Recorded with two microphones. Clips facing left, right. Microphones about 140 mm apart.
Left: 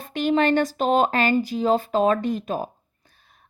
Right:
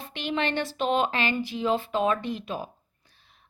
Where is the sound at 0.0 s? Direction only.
45° left (ahead or behind).